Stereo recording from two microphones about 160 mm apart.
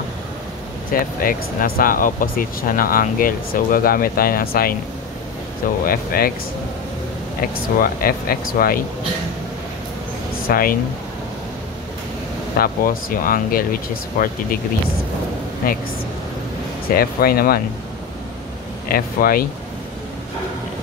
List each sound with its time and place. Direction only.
0.9 s speech: 65° left (ahead or behind)
5.9 s speech: 65° left (ahead or behind)
7.8 s speech: 65° left (ahead or behind)
10.5 s speech: 65° left (ahead or behind)
12.5 s speech: 65° left (ahead or behind)
16.9 s speech: 70° left (ahead or behind)
18.9 s speech: 65° left (ahead or behind)